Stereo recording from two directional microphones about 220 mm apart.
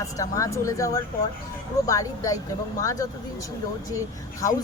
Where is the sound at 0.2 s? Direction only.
15° left (ahead or behind).